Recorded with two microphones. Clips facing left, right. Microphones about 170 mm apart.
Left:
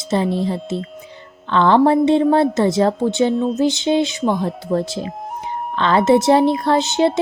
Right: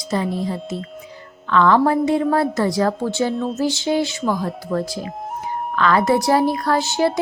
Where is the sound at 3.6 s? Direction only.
20° left (ahead or behind).